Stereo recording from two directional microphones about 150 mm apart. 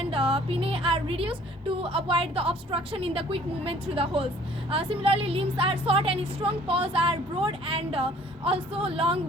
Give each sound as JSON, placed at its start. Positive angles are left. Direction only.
{"t": 0.0, "sound": "a woman's voice", "side_deg": -40}